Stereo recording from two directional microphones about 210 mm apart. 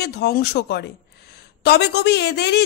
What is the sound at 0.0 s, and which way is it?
A woman's voice, 50° left (ahead or behind).